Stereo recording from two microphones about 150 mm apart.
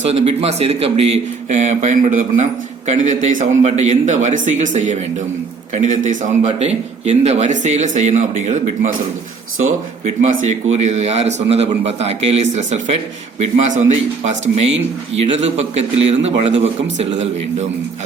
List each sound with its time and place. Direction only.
0.0 s a man's voice: 45° right (ahead or behind)
10.2 s a man's voice: 50° right (ahead or behind)